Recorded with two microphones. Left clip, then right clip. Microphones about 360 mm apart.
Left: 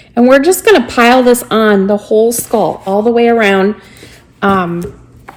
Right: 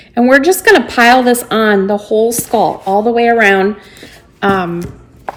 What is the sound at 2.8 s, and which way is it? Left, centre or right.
Speech, left.